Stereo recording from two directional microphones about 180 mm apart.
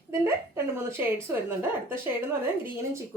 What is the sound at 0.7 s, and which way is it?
A woman's voice, 10° right (ahead or behind).